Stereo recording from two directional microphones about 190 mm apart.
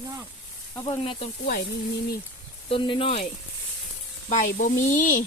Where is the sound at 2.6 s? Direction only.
25° left (ahead or behind).